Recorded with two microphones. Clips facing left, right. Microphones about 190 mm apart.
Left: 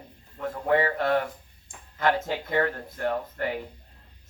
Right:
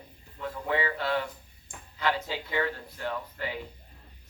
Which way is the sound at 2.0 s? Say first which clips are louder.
Left 5 dB; 50° left (ahead or behind).